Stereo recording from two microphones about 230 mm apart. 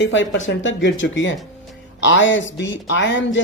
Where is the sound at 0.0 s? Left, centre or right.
Left.